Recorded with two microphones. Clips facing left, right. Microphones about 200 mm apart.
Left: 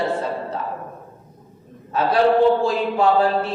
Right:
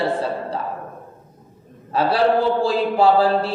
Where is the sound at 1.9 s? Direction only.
30° right (ahead or behind).